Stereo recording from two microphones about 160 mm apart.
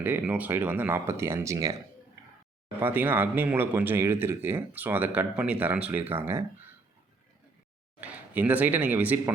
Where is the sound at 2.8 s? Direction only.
10° right (ahead or behind).